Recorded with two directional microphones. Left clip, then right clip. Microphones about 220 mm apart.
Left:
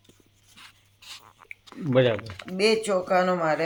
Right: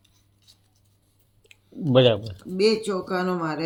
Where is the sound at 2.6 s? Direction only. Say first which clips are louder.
Even; 35° left (ahead or behind).